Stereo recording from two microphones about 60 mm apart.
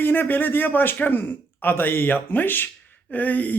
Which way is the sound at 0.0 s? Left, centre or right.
Left.